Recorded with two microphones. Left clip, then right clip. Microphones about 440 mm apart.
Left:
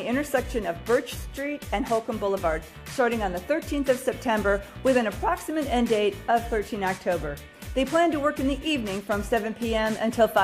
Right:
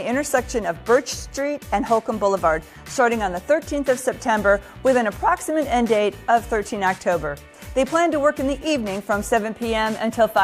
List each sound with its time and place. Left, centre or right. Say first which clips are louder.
0.0 s a woman's voice: right 5 dB; right